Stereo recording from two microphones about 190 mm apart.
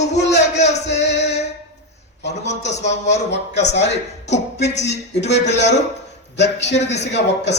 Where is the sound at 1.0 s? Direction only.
65° left (ahead or behind).